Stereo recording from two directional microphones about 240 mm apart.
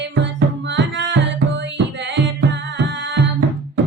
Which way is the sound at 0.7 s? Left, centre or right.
Right.